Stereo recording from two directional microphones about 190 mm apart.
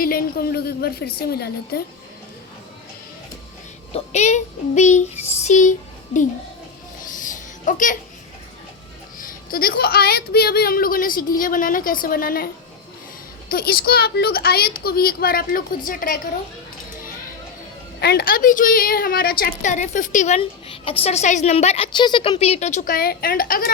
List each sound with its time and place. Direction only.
0.0 s a woman's voice: 50° left (ahead or behind)
3.9 s a woman's voice: 35° left (ahead or behind)
7.2 s a sound: 45° left (ahead or behind)
9.1 s a woman's voice: 50° left (ahead or behind)
13.5 s a woman's voice: 55° left (ahead or behind)
18.0 s a woman's voice: 55° left (ahead or behind)